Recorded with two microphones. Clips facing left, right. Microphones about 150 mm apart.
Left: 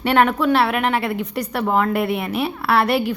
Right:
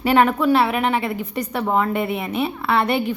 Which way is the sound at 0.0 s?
Centre (ahead or behind).